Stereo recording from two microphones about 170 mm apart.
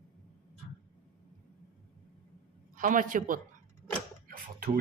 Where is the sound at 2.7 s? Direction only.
50° right (ahead or behind).